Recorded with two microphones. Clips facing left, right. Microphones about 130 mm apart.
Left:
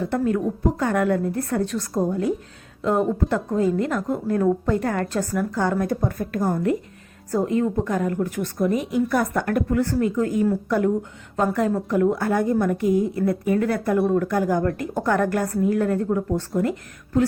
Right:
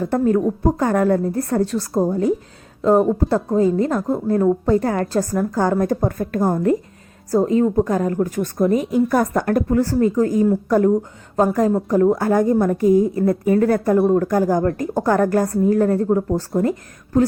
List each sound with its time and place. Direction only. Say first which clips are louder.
0.0 s a woman's voice: right 5 dB; 40° right (ahead or behind)
7.3 s a woman's voice: right 5 dB; 30° right (ahead or behind)